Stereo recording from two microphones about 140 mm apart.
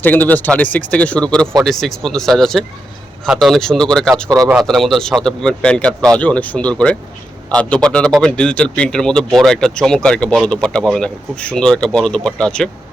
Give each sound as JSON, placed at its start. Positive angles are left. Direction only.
{"t": 0.0, "sound": "speech", "side_deg": 10}
{"t": 4.3, "sound": "speech", "side_deg": -25}
{"t": 4.5, "sound": "speech", "side_deg": 0}